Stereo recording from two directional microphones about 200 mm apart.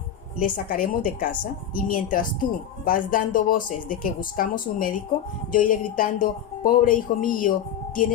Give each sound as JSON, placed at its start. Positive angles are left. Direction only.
{"t": 0.5, "sound": "speech", "side_deg": 45}